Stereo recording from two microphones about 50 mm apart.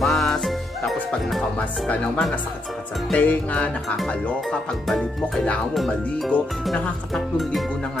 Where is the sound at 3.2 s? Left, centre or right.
Left.